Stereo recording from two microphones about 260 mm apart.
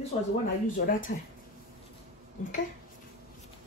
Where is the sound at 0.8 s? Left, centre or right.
Left.